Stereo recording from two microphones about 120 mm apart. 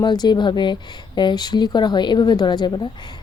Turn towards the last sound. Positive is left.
turn(degrees=40)  # may be behind; listen again after turning